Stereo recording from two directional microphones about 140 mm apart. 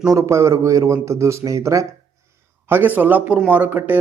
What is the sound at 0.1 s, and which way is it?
A man's voice, 20° right (ahead or behind).